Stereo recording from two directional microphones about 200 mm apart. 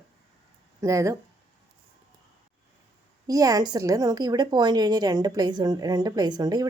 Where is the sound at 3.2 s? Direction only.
20° right (ahead or behind).